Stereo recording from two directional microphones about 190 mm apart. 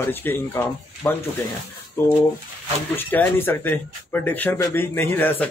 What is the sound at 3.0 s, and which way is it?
Speech, 10° left (ahead or behind).